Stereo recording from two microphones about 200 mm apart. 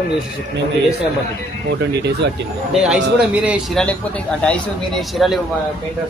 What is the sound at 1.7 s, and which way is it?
Speech, 55° right (ahead or behind).